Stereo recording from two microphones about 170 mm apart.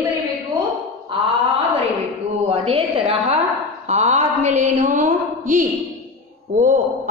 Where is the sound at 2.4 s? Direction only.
35° right (ahead or behind).